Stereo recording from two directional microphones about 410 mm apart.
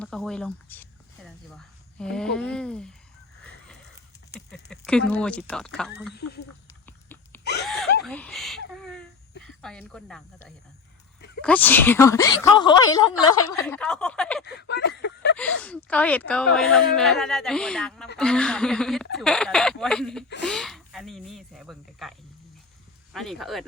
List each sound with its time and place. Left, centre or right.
0.0 s speech: centre
4.3 s speech: centre
6.2 s speech: left
6.8 s dog: centre
8.0 s a sound: centre
9.4 s speech: centre
14.4 s a sound: left
15.4 s speech: centre
23.1 s speech: centre